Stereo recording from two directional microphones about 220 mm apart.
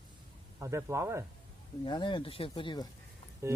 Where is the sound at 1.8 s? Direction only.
20° left (ahead or behind).